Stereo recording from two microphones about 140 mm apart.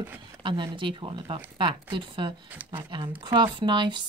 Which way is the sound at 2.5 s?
15° right (ahead or behind).